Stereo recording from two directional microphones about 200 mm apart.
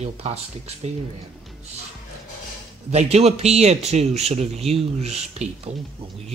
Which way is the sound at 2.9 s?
30° right (ahead or behind).